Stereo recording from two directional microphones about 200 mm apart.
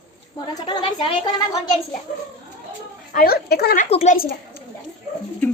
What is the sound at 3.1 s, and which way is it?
Speech, 50° left (ahead or behind).